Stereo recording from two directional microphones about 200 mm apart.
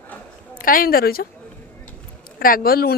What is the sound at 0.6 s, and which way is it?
Speech, 45° left (ahead or behind).